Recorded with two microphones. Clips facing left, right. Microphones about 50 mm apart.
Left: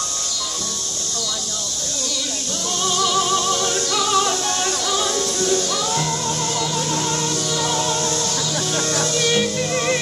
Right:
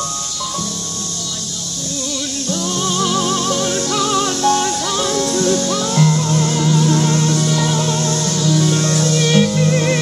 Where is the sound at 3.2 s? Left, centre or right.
Centre.